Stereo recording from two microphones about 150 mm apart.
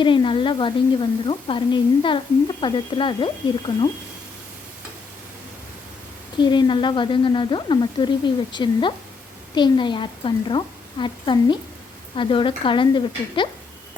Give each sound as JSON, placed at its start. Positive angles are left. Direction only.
{"t": 0.0, "sound": "speech", "side_deg": 35}
{"t": 6.4, "sound": "speech", "side_deg": 30}